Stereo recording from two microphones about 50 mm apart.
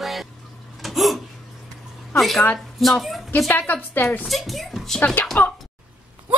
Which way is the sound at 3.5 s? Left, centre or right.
Left.